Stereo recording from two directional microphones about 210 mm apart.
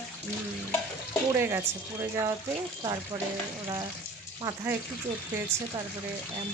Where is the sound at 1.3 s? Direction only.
10° right (ahead or behind).